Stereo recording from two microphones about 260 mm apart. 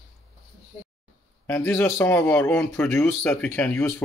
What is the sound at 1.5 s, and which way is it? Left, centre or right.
Speech, centre.